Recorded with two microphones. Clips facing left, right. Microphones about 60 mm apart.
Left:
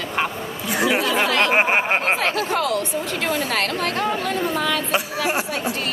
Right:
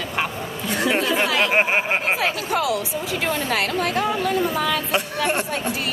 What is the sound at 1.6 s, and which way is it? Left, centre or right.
Speech, centre.